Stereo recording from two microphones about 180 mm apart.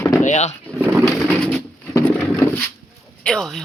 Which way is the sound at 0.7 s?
10° right (ahead or behind).